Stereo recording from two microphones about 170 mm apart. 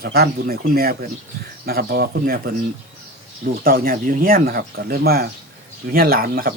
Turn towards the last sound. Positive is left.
turn(degrees=-60)  # may be behind; listen again after turning